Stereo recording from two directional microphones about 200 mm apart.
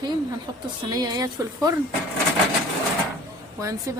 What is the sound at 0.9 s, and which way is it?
Speech, 20° right (ahead or behind).